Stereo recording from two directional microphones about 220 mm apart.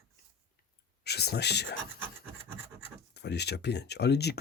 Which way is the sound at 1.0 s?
50° left (ahead or behind).